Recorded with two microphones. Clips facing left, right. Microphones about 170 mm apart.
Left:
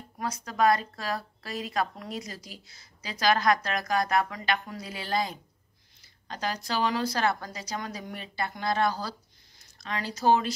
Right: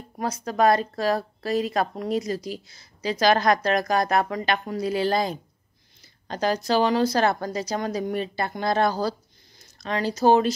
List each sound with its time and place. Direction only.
0.2 s speech: 35° right (ahead or behind)
3.1 s speech: 35° right (ahead or behind)